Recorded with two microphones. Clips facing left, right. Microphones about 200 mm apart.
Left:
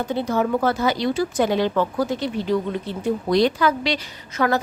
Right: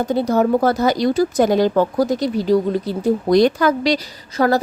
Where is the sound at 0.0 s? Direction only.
40° right (ahead or behind).